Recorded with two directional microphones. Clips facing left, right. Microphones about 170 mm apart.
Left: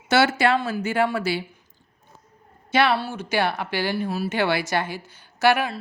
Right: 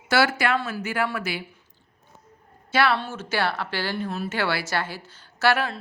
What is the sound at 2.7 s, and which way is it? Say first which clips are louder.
Speech: left 2 dB; 20° left (ahead or behind).